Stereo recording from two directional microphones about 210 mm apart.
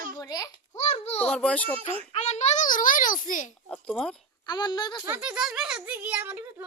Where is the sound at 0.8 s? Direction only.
30° left (ahead or behind).